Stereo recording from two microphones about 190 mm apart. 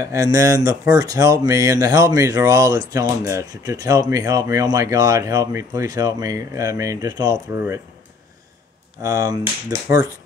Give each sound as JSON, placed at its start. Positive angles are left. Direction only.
{"t": 0.0, "sound": "speech", "side_deg": -15}
{"t": 9.0, "sound": "speech", "side_deg": -20}